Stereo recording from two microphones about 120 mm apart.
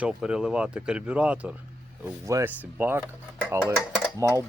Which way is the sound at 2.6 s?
15° right (ahead or behind).